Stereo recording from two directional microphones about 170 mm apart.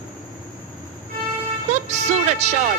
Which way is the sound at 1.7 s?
45° right (ahead or behind).